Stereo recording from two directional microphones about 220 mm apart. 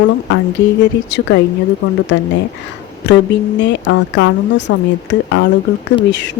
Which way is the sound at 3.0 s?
55° left (ahead or behind).